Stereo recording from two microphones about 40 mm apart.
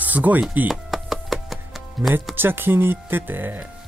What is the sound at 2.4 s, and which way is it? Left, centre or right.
Speech, right.